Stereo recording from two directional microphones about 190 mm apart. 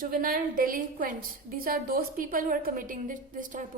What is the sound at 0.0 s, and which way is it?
A woman's voice, 50° right (ahead or behind).